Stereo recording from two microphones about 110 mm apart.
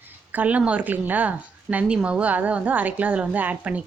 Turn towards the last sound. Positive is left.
turn(degrees=-15)  # may be behind; listen again after turning